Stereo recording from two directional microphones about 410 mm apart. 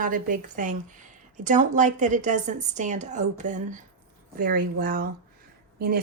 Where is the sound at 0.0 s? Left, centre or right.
Centre.